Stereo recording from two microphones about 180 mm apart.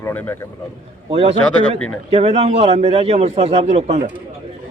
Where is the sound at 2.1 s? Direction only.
35° right (ahead or behind).